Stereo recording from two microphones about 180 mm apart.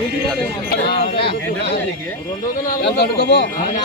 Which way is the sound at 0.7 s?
60° left (ahead or behind).